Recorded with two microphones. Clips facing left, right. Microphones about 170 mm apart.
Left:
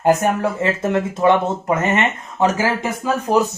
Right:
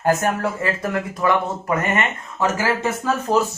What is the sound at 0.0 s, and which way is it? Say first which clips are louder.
Speech: left 3 dB; 20° left (ahead or behind).